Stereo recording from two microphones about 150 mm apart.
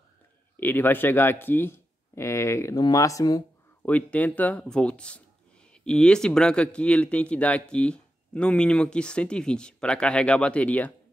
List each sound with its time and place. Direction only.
0.6 s speech: 15° left (ahead or behind)
3.8 s speech: 10° left (ahead or behind)